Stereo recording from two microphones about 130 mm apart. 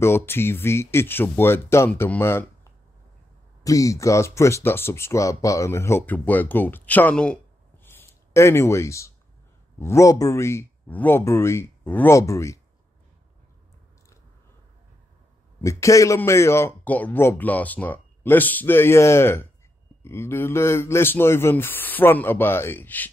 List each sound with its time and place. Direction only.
0.0 s speech: 20° left (ahead or behind)
3.6 s speech: 25° left (ahead or behind)
7.8 s a sound: 20° left (ahead or behind)
9.8 s speech: 20° left (ahead or behind)
15.6 s speech: 25° left (ahead or behind)